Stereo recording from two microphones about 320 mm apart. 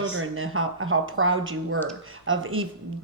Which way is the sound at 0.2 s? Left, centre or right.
Right.